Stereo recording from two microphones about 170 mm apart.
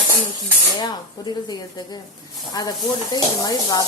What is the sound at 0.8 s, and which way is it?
Speech, 25° left (ahead or behind).